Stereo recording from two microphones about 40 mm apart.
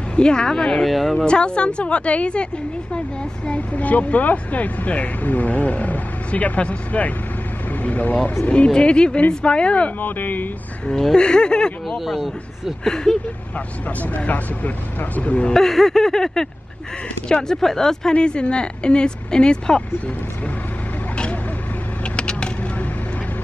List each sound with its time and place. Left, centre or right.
0.1 s speech: left
0.8 s a man's voice: centre
1.1 s speech: left
3.5 s speech: left
8.6 s speech: left
9.9 s speech: left
10.9 s a sound: centre
11.1 s speech: left
12.0 s a man's voice: centre
12.8 s a sound: centre
13.8 s speech: left
15.5 s a sound: centre
18.1 s speech: left
22.0 s vehicle: left